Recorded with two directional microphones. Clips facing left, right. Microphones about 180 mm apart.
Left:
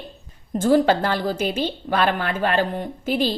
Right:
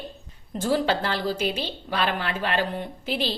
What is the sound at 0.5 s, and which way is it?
A woman's voice, 50° left (ahead or behind).